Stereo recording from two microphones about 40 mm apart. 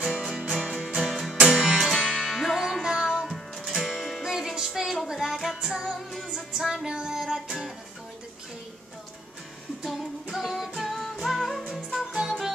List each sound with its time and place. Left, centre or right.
0.6 s music: centre
1.5 s music: right
1.8 s music: centre
4.6 s a sound: centre
5.0 s child singing: centre
5.6 s music: centre
7.2 s music: centre
10.3 s music: centre
12.1 s music: centre